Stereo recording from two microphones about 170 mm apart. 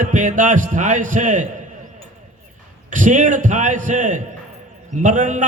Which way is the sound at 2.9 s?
45° right (ahead or behind).